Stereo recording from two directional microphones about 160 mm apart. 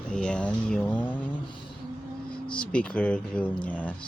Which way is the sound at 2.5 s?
5° left (ahead or behind).